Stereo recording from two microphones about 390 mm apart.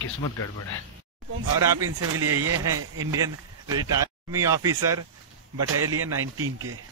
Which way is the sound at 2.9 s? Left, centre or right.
Centre.